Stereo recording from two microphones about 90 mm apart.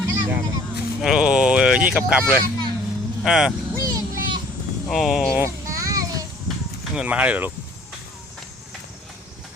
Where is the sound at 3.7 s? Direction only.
45° right (ahead or behind).